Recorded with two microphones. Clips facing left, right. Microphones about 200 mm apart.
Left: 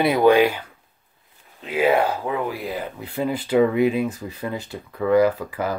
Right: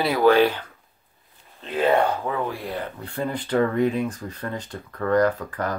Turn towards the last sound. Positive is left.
turn(degrees=5)  # may be behind; listen again after turning